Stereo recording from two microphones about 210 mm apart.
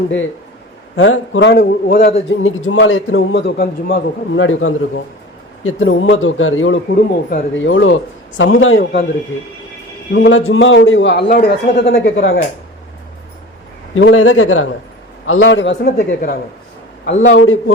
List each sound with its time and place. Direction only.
0.9 s a man's voice: 75° left (ahead or behind); by 2.1 s 45° left (ahead or behind)
2.4 s speech: 70° left (ahead or behind)
3.4 s a woman's voice: 45° left (ahead or behind)
4.4 s speech: 70° left (ahead or behind)
6.9 s a woman's voice: 45° left (ahead or behind)
7.5 s a man's voice: 65° left (ahead or behind)
8.8 s a woman's voice: 50° left (ahead or behind)
10.1 s a man's voice: 60° left (ahead or behind)
11.9 s a man's voice: 60° left (ahead or behind)
13.9 s speech: 75° left (ahead or behind)
15.3 s a man's voice: 65° left (ahead or behind)
15.8 s a woman's voice: 50° left (ahead or behind)
17.1 s speech: 60° left (ahead or behind)